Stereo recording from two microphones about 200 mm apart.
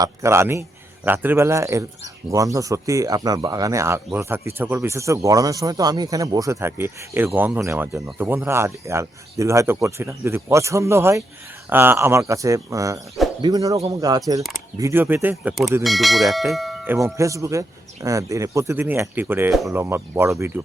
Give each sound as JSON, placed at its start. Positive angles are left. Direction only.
{"t": 0.0, "sound": "speech", "side_deg": -15}